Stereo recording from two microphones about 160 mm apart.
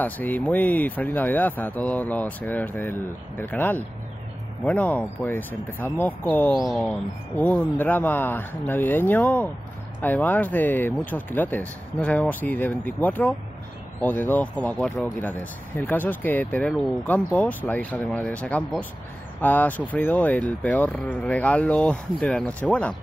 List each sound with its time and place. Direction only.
0.0 s speech: 10° left (ahead or behind)